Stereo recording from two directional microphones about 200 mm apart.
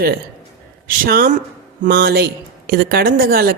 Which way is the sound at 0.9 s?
45° right (ahead or behind).